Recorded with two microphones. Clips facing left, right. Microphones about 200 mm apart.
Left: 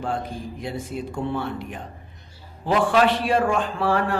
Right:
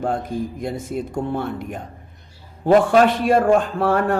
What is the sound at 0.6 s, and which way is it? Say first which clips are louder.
A man's voice: right 4 dB; 45° right (ahead or behind).